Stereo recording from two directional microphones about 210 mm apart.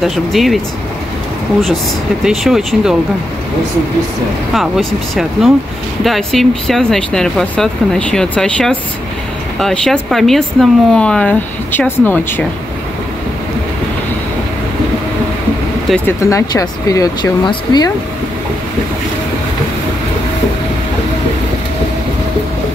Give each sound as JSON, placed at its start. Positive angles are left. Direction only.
{"t": 0.0, "sound": "speech", "side_deg": 0}
{"t": 2.2, "sound": "speech", "side_deg": 0}
{"t": 4.6, "sound": "speech", "side_deg": 0}
{"t": 15.9, "sound": "speech", "side_deg": 10}